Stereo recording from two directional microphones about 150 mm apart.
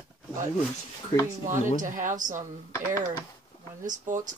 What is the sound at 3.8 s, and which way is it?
Speech, 60° right (ahead or behind).